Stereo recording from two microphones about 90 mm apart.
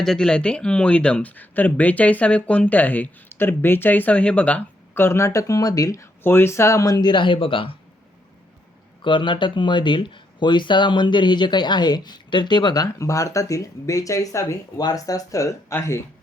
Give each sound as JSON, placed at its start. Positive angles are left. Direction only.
{"t": 0.0, "sound": "speech", "side_deg": 5}
{"t": 4.9, "sound": "speech", "side_deg": 30}
{"t": 6.2, "sound": "speech", "side_deg": 25}
{"t": 9.0, "sound": "speech", "side_deg": 65}
{"t": 13.0, "sound": "speech", "side_deg": 35}